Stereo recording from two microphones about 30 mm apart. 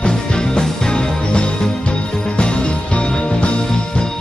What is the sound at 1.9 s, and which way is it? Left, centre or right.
Music, left.